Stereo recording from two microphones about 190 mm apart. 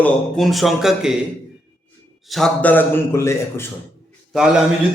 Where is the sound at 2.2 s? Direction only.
Centre (ahead or behind).